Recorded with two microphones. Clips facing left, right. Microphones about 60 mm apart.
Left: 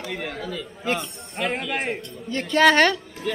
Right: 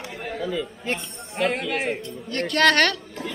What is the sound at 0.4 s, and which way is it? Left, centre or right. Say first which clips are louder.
Speech: right 4 dB; centre.